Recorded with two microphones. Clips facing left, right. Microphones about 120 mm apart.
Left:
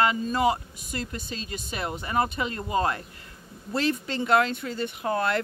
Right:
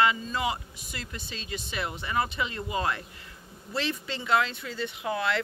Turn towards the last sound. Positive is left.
turn(degrees=45)  # may be behind; listen again after turning